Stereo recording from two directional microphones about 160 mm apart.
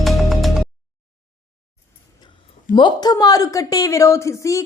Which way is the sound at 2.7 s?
25° left (ahead or behind).